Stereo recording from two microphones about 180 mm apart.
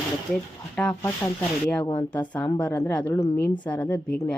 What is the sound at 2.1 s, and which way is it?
Speech, 10° left (ahead or behind).